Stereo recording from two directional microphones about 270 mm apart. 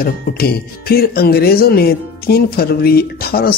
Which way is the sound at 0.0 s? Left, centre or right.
Left.